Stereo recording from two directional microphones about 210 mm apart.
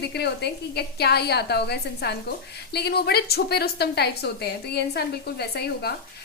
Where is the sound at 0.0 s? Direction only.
50° left (ahead or behind).